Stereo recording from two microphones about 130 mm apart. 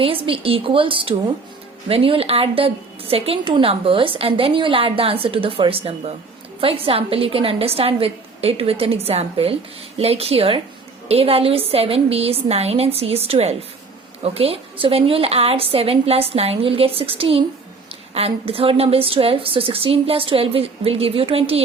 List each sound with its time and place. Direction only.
0.0 s a woman's voice: 45° right (ahead or behind)